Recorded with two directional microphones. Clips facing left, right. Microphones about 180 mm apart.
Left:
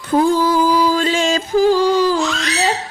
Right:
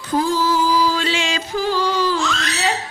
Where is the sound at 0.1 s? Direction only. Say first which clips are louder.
Left 4 dB; 55° left (ahead or behind).